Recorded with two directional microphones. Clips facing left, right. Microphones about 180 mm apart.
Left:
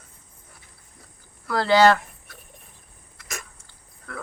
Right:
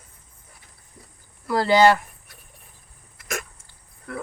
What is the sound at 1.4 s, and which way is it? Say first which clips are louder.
Cricket: right 1 dB; 10° right (ahead or behind).